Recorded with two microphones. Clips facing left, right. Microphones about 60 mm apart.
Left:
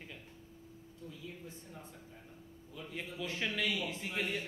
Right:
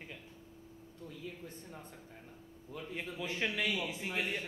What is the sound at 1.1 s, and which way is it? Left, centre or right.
Speech, right.